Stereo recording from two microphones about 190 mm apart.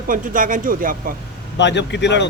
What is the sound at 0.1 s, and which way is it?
Speech, 45° right (ahead or behind).